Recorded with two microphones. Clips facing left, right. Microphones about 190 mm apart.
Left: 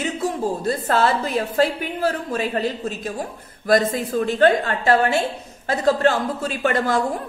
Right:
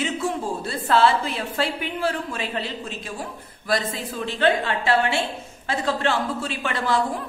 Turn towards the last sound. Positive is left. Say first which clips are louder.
# left 4 dB
turn(degrees=45)  # may be behind; listen again after turning